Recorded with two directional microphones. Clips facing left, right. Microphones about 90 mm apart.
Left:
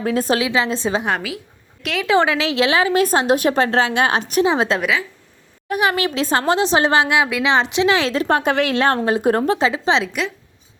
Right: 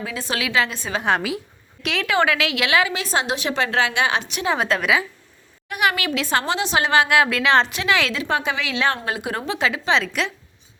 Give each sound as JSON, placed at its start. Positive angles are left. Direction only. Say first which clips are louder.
{"t": 0.0, "sound": "a woman's voice", "louder": "left 10 dB", "side_deg": 45}
{"t": 0.3, "sound": "a woman's voice", "louder": "left 3 dB", "side_deg": 25}
{"t": 1.8, "sound": "a woman's voice", "louder": "left 2 dB", "side_deg": 0}
{"t": 2.0, "sound": "a woman's voice", "louder": "left 4 dB", "side_deg": 25}
{"t": 2.9, "sound": "a woman's voice", "louder": "left 8 dB", "side_deg": 45}
{"t": 4.4, "sound": "a woman's voice", "louder": "left 3 dB", "side_deg": 25}
{"t": 8.2, "sound": "a woman's voice", "louder": "left 6 dB", "side_deg": 45}
{"t": 9.6, "sound": "a woman's voice", "louder": "left 3 dB", "side_deg": 30}
{"t": 10.1, "sound": "a woman's voice", "louder": "left 1 dB", "side_deg": 5}